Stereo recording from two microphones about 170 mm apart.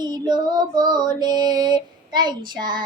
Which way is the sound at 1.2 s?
25° right (ahead or behind).